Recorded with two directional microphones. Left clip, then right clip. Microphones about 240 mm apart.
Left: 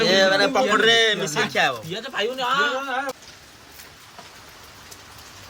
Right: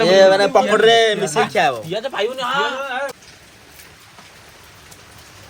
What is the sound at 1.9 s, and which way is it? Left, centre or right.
Speech, centre.